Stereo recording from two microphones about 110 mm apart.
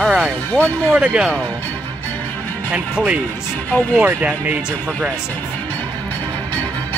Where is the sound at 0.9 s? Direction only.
10° right (ahead or behind).